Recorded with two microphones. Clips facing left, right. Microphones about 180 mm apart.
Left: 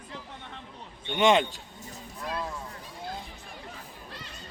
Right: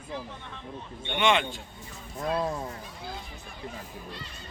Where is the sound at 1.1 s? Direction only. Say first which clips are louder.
Left 3 dB; 40° left (ahead or behind).